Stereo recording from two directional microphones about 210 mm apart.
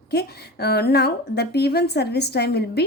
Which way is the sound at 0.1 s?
50° left (ahead or behind).